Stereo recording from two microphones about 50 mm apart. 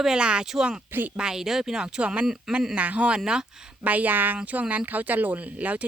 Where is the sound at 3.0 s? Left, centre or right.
Centre.